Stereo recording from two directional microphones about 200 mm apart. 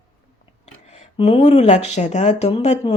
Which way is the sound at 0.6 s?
30° left (ahead or behind).